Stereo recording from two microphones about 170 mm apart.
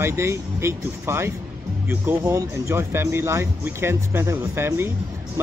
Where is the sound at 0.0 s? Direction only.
15° right (ahead or behind).